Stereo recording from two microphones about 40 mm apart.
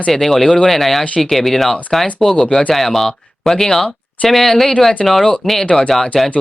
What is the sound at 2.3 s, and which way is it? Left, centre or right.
Speech, left.